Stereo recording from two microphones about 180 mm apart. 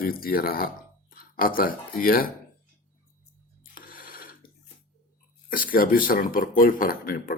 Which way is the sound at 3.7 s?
50° left (ahead or behind).